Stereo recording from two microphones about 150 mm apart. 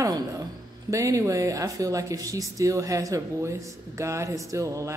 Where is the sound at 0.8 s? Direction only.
20° right (ahead or behind).